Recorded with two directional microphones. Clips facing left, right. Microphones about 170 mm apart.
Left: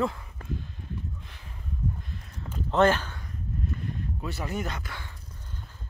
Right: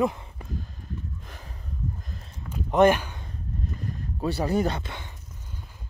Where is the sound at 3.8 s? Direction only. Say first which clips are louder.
Right 4 dB; 35° right (ahead or behind).